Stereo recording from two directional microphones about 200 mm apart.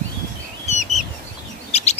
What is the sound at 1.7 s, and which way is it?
Bird, 30° left (ahead or behind).